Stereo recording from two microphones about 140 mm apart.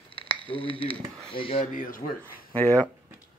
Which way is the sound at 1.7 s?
80° left.